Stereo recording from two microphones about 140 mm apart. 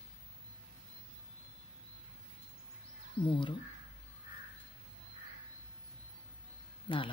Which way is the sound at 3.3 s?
35° left (ahead or behind).